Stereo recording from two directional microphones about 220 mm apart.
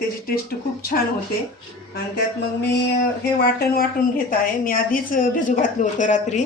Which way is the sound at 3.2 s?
45° left (ahead or behind).